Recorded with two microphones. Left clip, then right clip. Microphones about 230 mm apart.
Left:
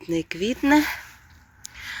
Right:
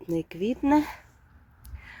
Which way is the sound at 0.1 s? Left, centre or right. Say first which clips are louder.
Left 3 dB; centre.